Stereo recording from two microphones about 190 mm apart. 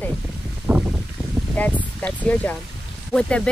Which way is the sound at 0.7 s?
10° right (ahead or behind).